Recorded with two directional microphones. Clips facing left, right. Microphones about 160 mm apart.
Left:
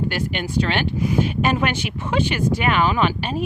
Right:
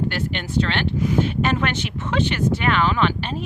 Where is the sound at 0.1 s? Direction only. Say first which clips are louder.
Left 1 dB; 10° left (ahead or behind).